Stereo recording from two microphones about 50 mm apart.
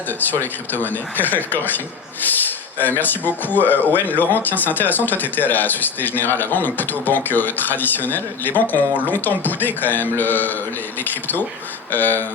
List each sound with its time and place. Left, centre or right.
0.3 s speech: left